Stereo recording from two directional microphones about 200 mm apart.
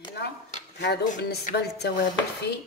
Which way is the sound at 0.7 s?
55° left (ahead or behind).